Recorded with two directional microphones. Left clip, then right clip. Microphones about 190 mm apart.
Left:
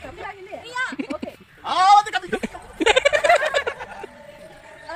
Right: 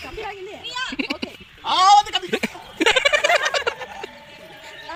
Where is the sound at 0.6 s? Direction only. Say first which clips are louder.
Left 1 dB; 30° left (ahead or behind).